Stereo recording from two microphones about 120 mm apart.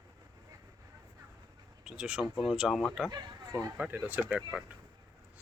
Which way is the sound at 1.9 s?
5° right (ahead or behind).